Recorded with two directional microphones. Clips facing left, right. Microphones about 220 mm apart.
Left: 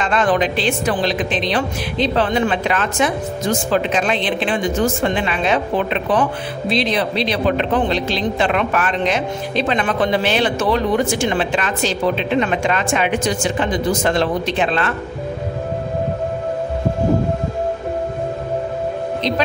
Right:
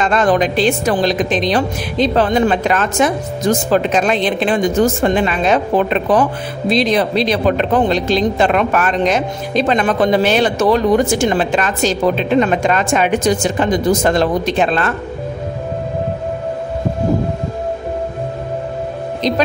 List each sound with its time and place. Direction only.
0.0 s a woman's voice: 45° right (ahead or behind)